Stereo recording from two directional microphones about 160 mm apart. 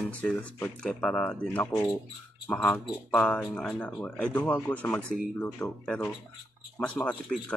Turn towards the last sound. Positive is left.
turn(degrees=10)  # may be behind; listen again after turning